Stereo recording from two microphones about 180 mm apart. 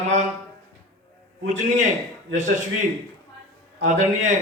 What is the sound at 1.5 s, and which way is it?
A man's voice, 40° right (ahead or behind).